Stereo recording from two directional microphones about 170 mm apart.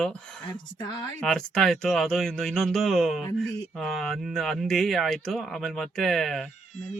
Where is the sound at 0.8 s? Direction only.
20° left (ahead or behind).